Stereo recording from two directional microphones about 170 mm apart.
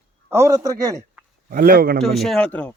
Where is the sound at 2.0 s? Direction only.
Centre (ahead or behind).